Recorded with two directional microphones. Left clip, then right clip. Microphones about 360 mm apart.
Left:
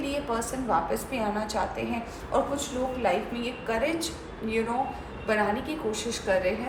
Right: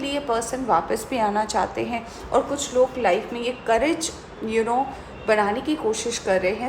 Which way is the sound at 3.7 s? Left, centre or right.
Centre.